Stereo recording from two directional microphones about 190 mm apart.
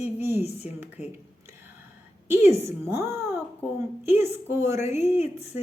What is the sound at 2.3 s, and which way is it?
Speech, 15° right (ahead or behind).